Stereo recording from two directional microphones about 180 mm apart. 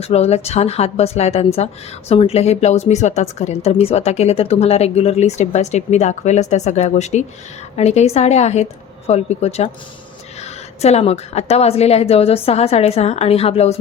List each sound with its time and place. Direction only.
0.0 s speech: 35° left (ahead or behind)